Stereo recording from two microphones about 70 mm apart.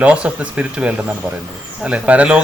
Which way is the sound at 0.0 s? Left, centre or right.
Centre.